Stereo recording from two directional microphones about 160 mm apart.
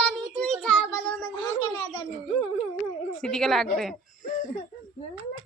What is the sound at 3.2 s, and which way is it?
Speech, 5° left (ahead or behind).